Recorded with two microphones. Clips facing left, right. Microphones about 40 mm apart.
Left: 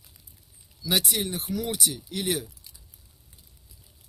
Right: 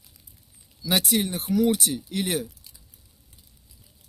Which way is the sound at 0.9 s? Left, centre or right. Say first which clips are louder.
Right 3 dB; right.